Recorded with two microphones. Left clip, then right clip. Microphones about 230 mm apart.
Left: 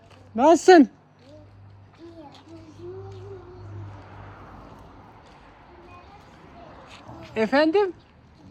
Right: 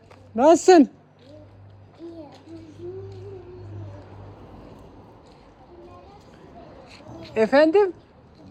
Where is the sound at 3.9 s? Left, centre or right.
Centre.